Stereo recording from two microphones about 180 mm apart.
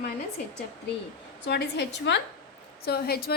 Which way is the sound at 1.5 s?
70° left (ahead or behind).